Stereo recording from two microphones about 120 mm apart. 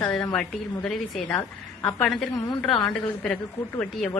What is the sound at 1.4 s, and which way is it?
Speech, 15° left (ahead or behind).